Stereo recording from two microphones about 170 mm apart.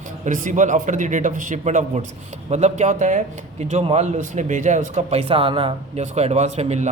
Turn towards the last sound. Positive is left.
turn(degrees=-40)  # may be behind; listen again after turning